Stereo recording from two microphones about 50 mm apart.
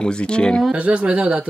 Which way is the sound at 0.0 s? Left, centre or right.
Centre.